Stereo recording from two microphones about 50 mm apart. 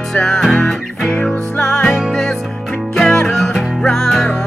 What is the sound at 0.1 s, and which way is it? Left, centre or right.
Music, centre.